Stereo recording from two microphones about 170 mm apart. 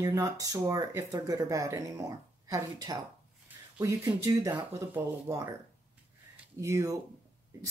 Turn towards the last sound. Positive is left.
turn(degrees=-20)  # may be behind; listen again after turning